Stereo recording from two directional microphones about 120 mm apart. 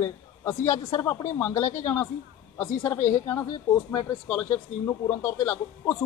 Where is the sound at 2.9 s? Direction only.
90° left.